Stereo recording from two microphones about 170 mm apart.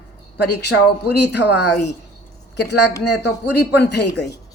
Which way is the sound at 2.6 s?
80° left.